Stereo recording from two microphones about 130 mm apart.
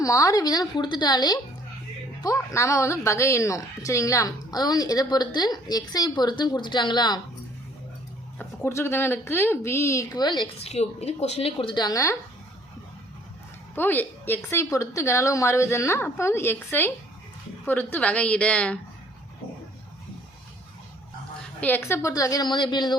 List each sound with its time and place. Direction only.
0.0 s a woman's voice: 25° left (ahead or behind)
8.4 s a woman's voice: 20° left (ahead or behind); by 10.5 s 35° left (ahead or behind)
10.6 s a woman's voice: 55° left (ahead or behind); by 12.1 s 25° left (ahead or behind)
13.7 s a woman's voice: 15° left (ahead or behind)
21.6 s a woman's voice: 15° left (ahead or behind); by 23.0 s 35° left (ahead or behind)